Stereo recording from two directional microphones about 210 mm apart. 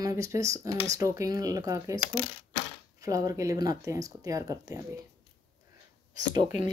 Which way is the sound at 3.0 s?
15° right (ahead or behind).